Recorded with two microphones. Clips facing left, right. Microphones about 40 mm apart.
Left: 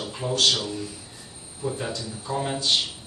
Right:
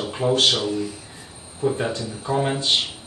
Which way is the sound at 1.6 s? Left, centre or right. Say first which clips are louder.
Right 6 dB; right.